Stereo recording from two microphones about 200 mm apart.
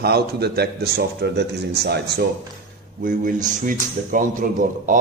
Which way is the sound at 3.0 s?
40° right (ahead or behind).